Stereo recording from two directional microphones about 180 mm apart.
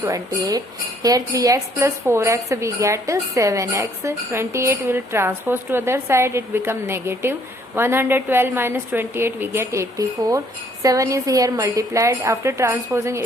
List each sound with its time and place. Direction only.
0.0 s a woman's voice: 20° right (ahead or behind)